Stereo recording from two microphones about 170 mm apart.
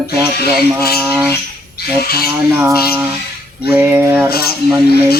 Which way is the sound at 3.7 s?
10° right (ahead or behind).